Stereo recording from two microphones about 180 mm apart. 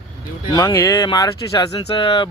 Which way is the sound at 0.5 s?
20° left (ahead or behind).